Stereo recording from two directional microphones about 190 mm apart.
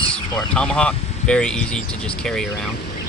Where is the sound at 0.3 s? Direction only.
5° left (ahead or behind).